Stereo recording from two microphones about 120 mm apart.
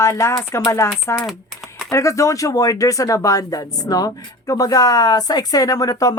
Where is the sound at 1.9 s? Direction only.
25° left (ahead or behind).